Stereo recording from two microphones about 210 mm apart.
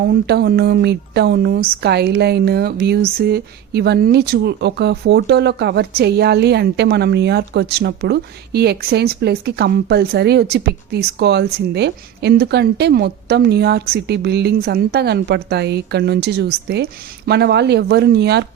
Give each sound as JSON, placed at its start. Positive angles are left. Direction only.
{"t": 0.0, "sound": "speech", "side_deg": -50}